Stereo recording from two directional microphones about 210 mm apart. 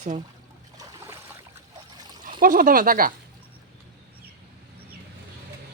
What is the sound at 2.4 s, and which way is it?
Speech, 40° right (ahead or behind).